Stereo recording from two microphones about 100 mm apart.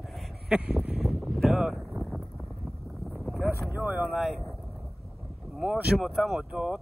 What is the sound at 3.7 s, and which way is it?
Speech, 20° right (ahead or behind).